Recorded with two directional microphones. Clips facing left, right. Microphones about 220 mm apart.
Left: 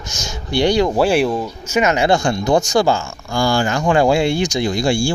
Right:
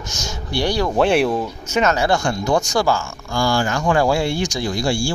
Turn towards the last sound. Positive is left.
turn(degrees=20)  # may be behind; listen again after turning